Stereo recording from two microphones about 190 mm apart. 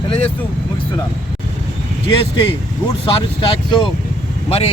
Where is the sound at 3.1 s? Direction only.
25° left (ahead or behind).